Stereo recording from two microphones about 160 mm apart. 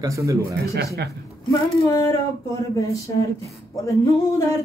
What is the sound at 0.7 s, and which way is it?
Speech, 90° right.